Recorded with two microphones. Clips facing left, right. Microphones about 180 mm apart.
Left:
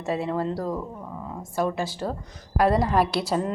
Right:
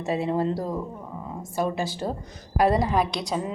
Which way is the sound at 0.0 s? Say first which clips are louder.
Right 2 dB; 20° right (ahead or behind).